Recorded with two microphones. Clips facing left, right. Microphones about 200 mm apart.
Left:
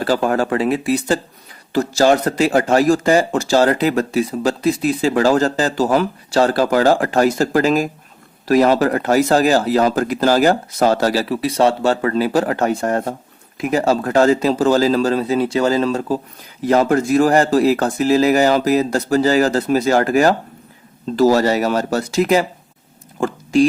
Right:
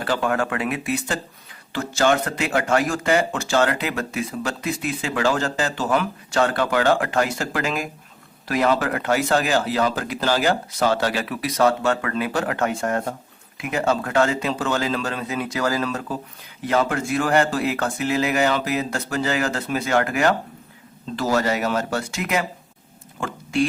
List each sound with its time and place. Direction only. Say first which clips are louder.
0.0 s speech: left 5 dB; 35° left (ahead or behind)